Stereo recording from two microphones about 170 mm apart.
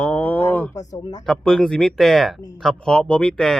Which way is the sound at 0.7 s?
20° left (ahead or behind).